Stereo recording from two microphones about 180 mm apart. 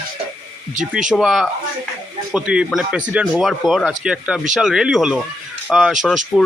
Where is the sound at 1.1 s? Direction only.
Centre (ahead or behind).